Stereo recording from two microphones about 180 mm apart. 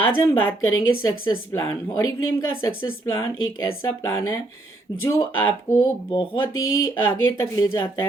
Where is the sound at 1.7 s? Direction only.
20° left (ahead or behind).